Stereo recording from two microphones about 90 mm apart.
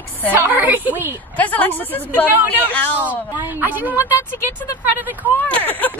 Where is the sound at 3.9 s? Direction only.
35° left (ahead or behind).